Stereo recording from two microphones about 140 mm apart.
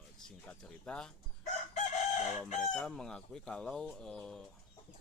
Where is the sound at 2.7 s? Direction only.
5° left (ahead or behind).